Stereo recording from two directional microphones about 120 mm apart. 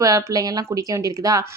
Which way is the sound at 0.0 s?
30° right (ahead or behind).